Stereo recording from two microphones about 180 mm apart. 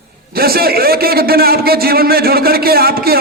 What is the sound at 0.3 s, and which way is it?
A man's voice, 55° right (ahead or behind).